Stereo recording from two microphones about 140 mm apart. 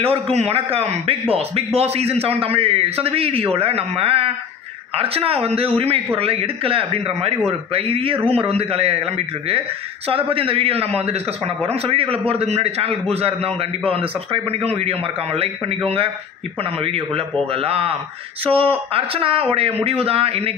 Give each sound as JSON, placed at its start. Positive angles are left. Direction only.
{"t": 0.0, "sound": "a man's voice", "side_deg": -45}